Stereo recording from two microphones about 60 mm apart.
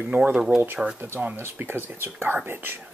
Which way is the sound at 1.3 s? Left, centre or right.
Right.